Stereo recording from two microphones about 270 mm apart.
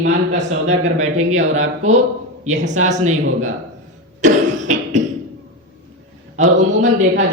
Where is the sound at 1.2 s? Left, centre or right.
Right.